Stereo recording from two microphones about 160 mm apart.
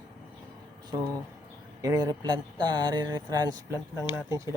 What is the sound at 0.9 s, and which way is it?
Speech, 25° right (ahead or behind).